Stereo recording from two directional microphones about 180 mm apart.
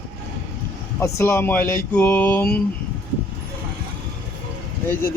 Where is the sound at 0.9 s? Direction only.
15° left (ahead or behind).